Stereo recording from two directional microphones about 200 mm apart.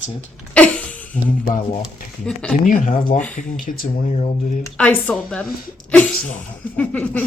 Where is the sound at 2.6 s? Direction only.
40° left (ahead or behind).